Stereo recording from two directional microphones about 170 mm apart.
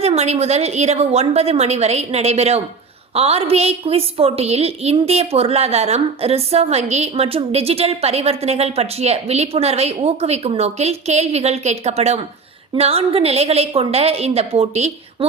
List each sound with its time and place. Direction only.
0.0 s a woman's voice: 40° right (ahead or behind)